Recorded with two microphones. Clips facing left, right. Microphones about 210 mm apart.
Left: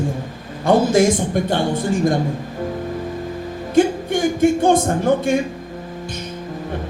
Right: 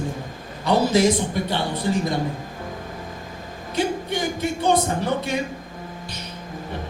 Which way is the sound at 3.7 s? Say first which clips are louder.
Left 8 dB; 50° left (ahead or behind).